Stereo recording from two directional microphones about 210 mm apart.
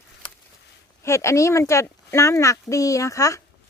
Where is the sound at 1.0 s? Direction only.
15° left (ahead or behind).